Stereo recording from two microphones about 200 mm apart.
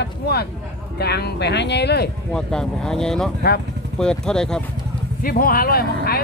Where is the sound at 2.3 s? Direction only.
5° left (ahead or behind).